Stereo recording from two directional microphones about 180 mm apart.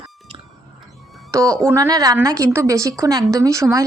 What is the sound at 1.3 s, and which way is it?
A woman's voice, 15° right (ahead or behind).